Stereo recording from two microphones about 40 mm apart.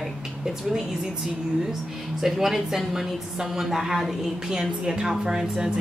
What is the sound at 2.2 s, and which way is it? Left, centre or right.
A woman's voice, centre.